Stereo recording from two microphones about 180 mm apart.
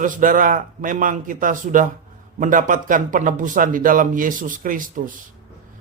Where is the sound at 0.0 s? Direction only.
50° right (ahead or behind).